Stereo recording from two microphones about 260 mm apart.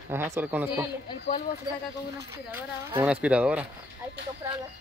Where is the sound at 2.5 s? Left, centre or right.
Centre.